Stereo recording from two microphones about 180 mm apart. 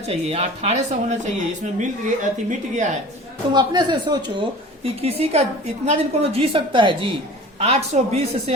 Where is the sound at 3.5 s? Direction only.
25° right (ahead or behind).